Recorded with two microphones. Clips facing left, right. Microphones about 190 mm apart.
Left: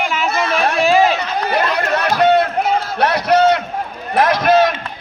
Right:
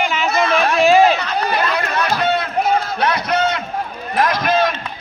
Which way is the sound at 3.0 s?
65° left (ahead or behind).